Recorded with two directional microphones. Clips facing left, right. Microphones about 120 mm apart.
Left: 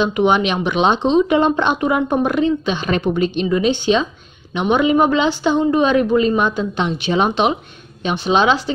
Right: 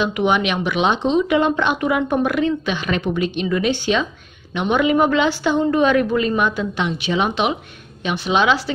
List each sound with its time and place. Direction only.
0.0 s a woman's voice: 30° left (ahead or behind)